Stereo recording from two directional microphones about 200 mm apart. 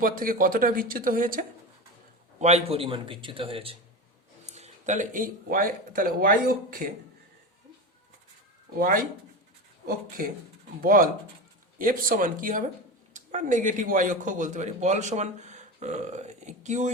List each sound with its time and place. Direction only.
0.0 s speech: 45° right (ahead or behind)
2.4 s a man's voice: 30° right (ahead or behind)
8.8 s speech: 45° right (ahead or behind)
11.8 s speech: 45° right (ahead or behind)